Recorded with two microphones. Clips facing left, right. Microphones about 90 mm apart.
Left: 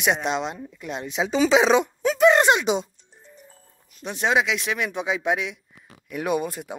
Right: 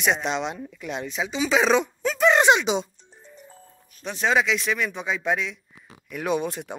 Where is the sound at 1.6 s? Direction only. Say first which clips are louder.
Left 2 dB; 15° left (ahead or behind).